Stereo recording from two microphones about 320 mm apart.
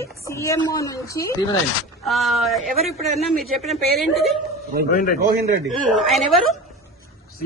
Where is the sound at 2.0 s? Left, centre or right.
Centre.